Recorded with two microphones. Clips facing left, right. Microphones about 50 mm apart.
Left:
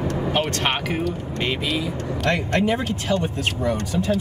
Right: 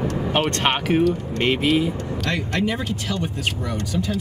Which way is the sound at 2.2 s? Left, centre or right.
Left.